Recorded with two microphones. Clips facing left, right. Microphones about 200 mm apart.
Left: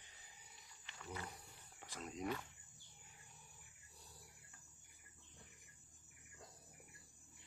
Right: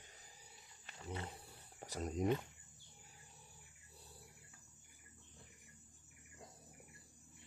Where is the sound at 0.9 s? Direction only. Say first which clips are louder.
Right 3 dB; 30° right (ahead or behind).